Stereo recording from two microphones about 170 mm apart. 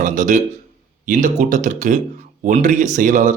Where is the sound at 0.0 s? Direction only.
50° right (ahead or behind).